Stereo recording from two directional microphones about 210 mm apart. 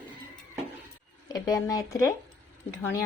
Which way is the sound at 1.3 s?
15° left (ahead or behind).